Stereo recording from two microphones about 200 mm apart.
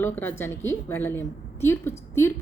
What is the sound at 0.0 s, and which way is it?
A woman's voice, 10° left (ahead or behind).